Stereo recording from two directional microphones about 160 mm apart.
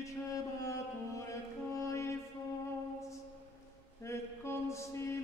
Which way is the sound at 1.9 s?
20° left (ahead or behind).